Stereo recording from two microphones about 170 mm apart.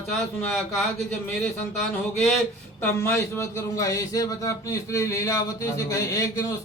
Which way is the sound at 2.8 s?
15° left (ahead or behind).